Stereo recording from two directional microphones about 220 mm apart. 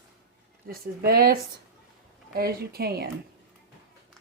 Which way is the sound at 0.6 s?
45° right (ahead or behind).